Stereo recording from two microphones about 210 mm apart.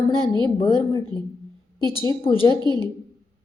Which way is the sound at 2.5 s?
20° right (ahead or behind).